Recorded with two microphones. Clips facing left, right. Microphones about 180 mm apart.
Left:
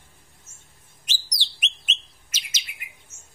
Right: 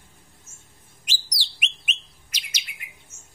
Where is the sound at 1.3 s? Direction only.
10° right (ahead or behind).